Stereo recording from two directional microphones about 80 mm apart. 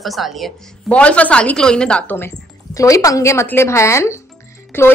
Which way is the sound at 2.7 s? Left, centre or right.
Left.